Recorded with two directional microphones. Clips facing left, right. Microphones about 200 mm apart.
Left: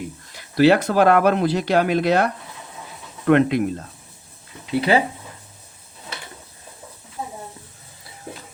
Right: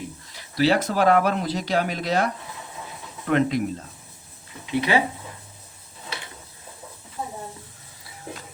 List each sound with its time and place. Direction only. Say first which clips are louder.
0.3 s speech: left 6 dB; 55° left (ahead or behind)
4.7 s speech: left 3 dB; 35° left (ahead or behind)